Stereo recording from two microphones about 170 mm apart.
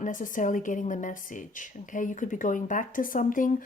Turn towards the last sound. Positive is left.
turn(degrees=50)  # may be behind; listen again after turning